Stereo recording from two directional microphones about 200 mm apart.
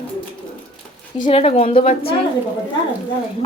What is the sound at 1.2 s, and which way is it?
Speech, 30° left (ahead or behind).